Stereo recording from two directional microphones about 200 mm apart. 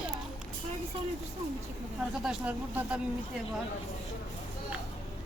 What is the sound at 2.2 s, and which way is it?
Speech, 5° right (ahead or behind).